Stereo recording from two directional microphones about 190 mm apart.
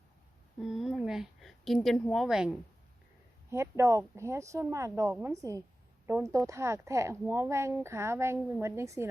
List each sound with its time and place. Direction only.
0.6 s a woman's voice: centre (ahead or behind)
3.5 s a woman's voice: 15° right (ahead or behind)